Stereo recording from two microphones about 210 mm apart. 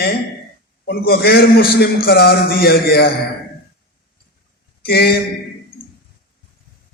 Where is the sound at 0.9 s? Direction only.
45° left (ahead or behind).